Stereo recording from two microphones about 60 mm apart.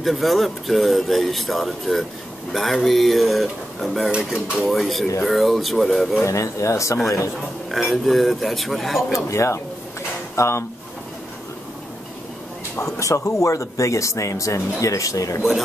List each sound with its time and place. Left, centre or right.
0.0 s speech: centre
4.1 s speech: centre
4.6 s speech: centre
6.2 s speech: left
7.7 s speech: centre
9.3 s speech: left
12.8 s speech: left